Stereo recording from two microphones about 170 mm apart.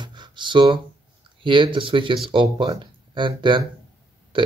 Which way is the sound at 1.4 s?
30° right (ahead or behind).